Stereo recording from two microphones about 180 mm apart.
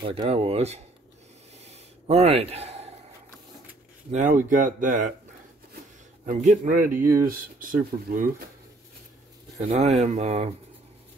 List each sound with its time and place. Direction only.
0.0 s speech: 35° right (ahead or behind)
1.6 s a sound: 35° right (ahead or behind)
4.1 s speech: 45° right (ahead or behind)
6.2 s speech: 45° right (ahead or behind)
6.9 s speech: 15° right (ahead or behind)
7.2 s speech: 50° right (ahead or behind)
9.6 s speech: 40° right (ahead or behind)